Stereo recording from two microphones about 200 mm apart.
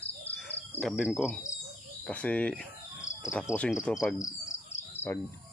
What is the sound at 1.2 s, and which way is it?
Speech, 10° left (ahead or behind).